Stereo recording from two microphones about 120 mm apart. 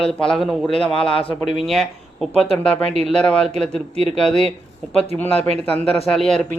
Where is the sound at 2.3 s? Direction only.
10° left (ahead or behind).